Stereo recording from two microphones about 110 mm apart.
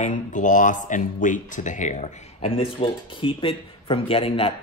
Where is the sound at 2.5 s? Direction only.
55° left (ahead or behind).